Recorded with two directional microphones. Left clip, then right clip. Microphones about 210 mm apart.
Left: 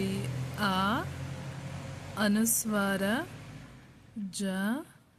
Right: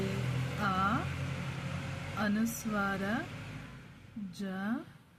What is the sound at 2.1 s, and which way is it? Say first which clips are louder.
A woman's voice: left 5 dB; 40° left (ahead or behind).